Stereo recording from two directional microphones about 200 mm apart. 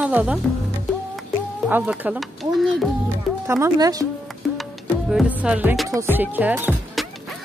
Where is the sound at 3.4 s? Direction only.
15° right (ahead or behind).